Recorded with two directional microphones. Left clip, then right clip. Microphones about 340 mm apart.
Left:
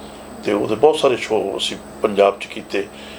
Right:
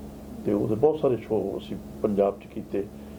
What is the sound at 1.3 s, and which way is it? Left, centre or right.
Speech, left.